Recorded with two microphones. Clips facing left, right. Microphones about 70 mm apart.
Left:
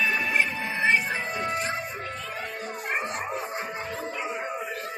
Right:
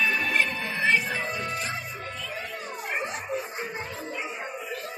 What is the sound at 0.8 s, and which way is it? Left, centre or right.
Music, left.